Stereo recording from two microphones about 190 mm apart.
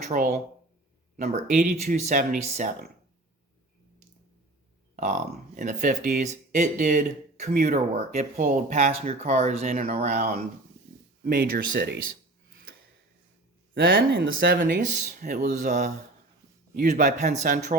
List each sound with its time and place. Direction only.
0.1 s speech: 45° right (ahead or behind)
4.9 s speech: 40° right (ahead or behind)
11.2 s speech: 55° right (ahead or behind)
13.9 s speech: 65° right (ahead or behind)
15.5 s speech: 40° right (ahead or behind)
17.3 s speech: 40° right (ahead or behind)